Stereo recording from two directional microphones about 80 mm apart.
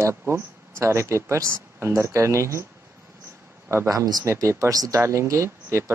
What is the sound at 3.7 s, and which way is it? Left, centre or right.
Speech, right.